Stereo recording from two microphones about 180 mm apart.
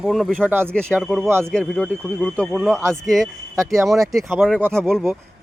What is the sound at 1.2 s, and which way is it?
Speech, 15° right (ahead or behind).